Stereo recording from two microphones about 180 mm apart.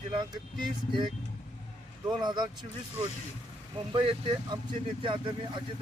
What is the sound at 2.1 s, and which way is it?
Speech, 25° right (ahead or behind).